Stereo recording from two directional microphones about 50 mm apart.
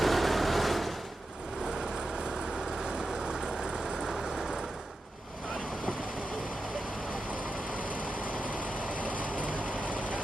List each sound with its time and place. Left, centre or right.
0.0 s vehicle: centre
2.8 s vehicle: centre
8.3 s vehicle: right
10.0 s vehicle: right